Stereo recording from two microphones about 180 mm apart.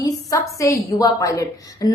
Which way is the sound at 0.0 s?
20° left (ahead or behind).